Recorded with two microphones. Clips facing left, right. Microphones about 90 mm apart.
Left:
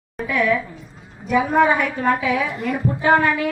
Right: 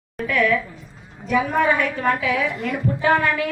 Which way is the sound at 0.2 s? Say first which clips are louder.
Even; 10° left (ahead or behind).